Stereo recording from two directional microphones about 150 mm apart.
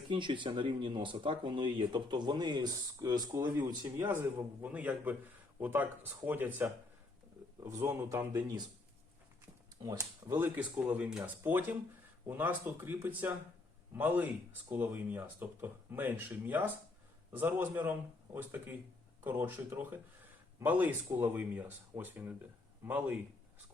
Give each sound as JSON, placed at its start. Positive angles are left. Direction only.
{"t": 0.1, "sound": "a man's voice", "side_deg": -30}
{"t": 9.8, "sound": "a man's voice", "side_deg": -20}